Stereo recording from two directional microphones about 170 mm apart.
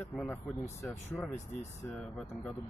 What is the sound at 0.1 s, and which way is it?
Speech, 10° left (ahead or behind).